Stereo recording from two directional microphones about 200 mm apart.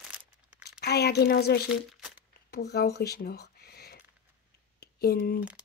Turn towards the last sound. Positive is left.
turn(degrees=50)  # may be behind; listen again after turning